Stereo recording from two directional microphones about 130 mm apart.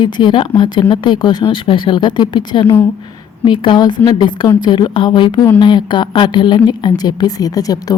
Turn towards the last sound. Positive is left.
turn(degrees=30)  # may be behind; listen again after turning